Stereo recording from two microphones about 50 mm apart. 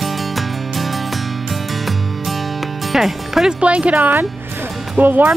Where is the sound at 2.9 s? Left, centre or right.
Centre.